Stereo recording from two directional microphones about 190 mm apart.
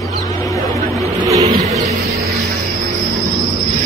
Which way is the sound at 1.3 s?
35° right (ahead or behind).